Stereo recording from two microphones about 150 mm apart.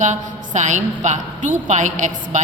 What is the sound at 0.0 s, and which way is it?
A woman's voice, 50° right (ahead or behind).